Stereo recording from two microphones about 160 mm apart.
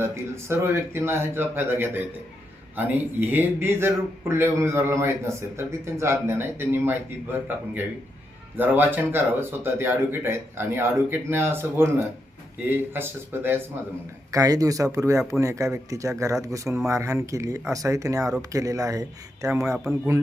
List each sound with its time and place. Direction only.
0.0 s speech: 15° right (ahead or behind)